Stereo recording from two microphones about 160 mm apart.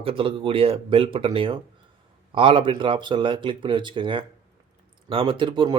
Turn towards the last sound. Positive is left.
turn(degrees=-30)  # may be behind; listen again after turning